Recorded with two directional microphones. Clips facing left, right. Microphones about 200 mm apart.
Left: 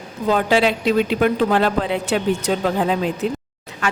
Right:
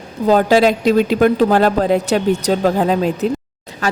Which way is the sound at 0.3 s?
40° right (ahead or behind).